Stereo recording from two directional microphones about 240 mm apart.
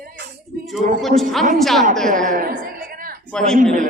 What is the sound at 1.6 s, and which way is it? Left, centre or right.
Speech, centre.